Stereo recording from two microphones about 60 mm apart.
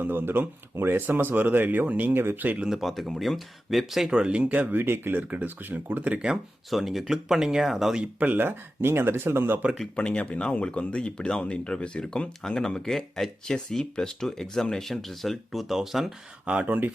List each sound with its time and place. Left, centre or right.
0.0 s speech: right
2.6 s speech: centre
4.1 s speech: centre; by 5.2 s right
5.3 s speech: right
6.7 s speech: centre
8.2 s speech: right
9.9 s speech: centre
16.5 s speech: right